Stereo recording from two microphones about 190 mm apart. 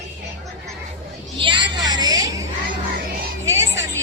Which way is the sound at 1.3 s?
25° right (ahead or behind).